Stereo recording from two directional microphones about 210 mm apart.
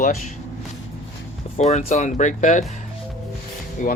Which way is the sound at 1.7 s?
30° left (ahead or behind).